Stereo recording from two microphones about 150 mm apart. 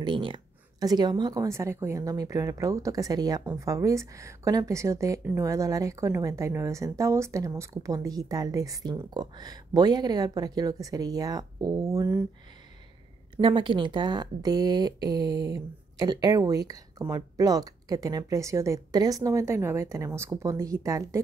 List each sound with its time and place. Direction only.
0.0 s a woman's voice: 35° right (ahead or behind)
13.4 s a woman's voice: 35° right (ahead or behind)